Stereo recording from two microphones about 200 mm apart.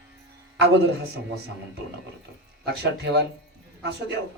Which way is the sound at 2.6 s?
55° right (ahead or behind).